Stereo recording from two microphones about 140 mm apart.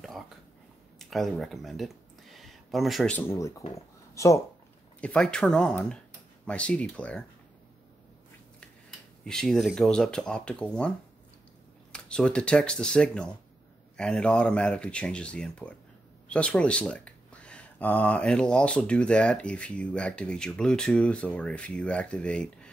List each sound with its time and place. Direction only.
0.9 s speech: centre (ahead or behind)
2.3 s a sound: centre (ahead or behind)
3.1 s speech: 15° left (ahead or behind)
5.0 s speech: 5° left (ahead or behind)
9.2 s speech: 5° left (ahead or behind)
11.9 s speech: 5° left (ahead or behind)